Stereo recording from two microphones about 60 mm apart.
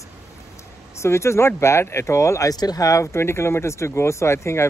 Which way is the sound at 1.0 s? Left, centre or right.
Left.